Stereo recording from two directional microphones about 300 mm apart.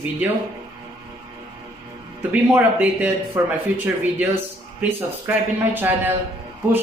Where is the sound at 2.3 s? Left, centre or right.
Centre.